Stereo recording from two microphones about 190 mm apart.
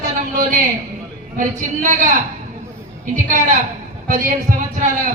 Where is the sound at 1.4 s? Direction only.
40° right (ahead or behind).